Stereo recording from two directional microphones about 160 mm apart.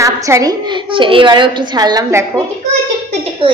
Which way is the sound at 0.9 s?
30° right (ahead or behind).